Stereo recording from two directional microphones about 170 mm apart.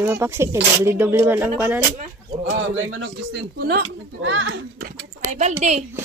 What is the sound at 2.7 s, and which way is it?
Speech, 90° right.